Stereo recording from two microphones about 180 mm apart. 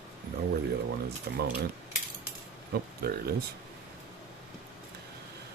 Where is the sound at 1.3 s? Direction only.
60° right (ahead or behind).